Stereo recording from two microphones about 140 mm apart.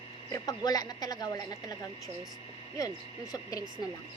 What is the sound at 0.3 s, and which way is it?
A woman's voice, 25° left (ahead or behind).